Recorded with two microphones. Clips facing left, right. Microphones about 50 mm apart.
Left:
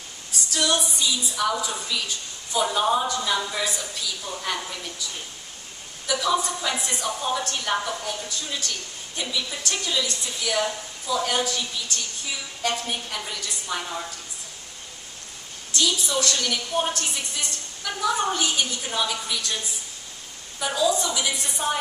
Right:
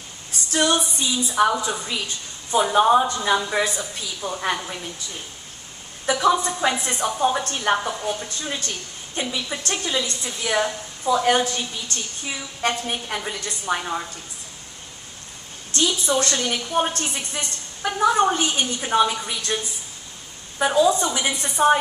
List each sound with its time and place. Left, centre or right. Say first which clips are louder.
0.5 s a woman's voice: right 4 dB; right
6.0 s a woman's voice: right 5 dB; right
13.7 s a woman's voice: right 4 dB; centre
15.7 s a woman's voice: right 3 dB; right